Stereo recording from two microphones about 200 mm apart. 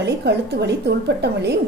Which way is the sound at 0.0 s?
55° right (ahead or behind).